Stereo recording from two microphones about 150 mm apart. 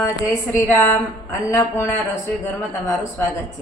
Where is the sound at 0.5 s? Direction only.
15° left (ahead or behind).